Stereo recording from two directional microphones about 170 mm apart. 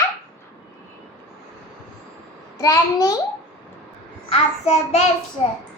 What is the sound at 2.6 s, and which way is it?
Speech, 20° left (ahead or behind).